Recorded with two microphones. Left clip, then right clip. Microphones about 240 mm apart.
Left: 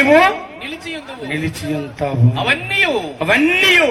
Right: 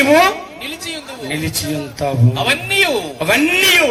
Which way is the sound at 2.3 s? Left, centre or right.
Right.